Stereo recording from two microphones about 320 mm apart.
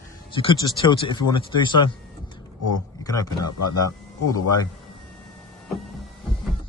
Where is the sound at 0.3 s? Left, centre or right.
Centre.